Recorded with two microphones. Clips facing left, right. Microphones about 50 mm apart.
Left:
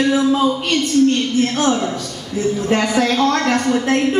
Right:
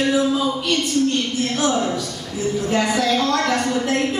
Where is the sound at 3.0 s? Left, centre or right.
Left.